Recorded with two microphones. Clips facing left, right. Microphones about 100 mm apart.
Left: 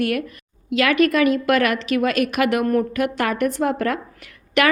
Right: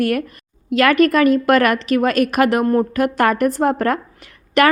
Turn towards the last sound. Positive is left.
turn(degrees=-40)  # may be behind; listen again after turning